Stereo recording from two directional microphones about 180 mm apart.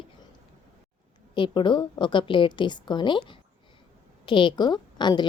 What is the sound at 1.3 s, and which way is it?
A woman's voice, 25° left (ahead or behind).